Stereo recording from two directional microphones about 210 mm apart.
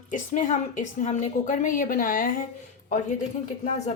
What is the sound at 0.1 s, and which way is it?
A woman's voice, 35° left (ahead or behind).